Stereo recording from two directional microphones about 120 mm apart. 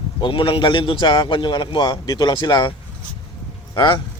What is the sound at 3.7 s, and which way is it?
Speech, 40° left (ahead or behind).